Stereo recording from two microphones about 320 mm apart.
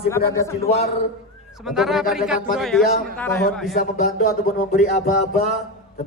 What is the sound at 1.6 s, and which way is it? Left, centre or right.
A man's voice, centre.